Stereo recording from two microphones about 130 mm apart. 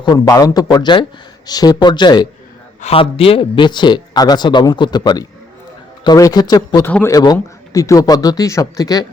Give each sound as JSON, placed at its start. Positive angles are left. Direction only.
{"t": 0.0, "sound": "speech", "side_deg": 30}
{"t": 2.8, "sound": "speech", "side_deg": 45}
{"t": 6.8, "sound": "a man's voice", "side_deg": 20}